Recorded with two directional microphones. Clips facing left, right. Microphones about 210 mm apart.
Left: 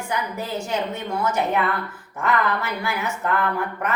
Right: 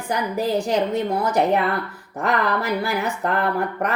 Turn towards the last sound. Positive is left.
turn(degrees=-35)  # may be behind; listen again after turning